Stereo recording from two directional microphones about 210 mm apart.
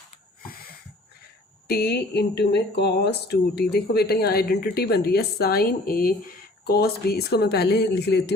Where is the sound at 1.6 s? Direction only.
50° left (ahead or behind).